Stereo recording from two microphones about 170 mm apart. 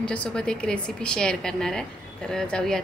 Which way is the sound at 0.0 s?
5° left (ahead or behind).